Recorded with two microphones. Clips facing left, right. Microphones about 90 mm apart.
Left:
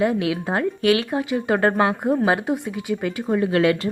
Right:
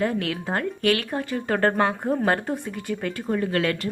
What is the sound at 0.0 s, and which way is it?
A woman's voice, 10° left (ahead or behind).